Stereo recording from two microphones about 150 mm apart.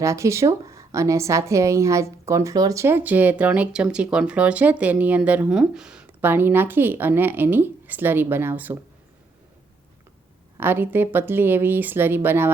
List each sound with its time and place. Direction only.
0.0 s a woman's voice: 20° right (ahead or behind)
10.6 s a woman's voice: 15° right (ahead or behind)